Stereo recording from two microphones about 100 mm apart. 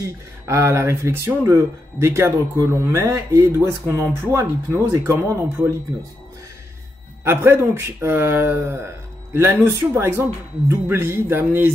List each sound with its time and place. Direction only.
0.0 s speech: 30° right (ahead or behind)
7.2 s speech: 20° right (ahead or behind)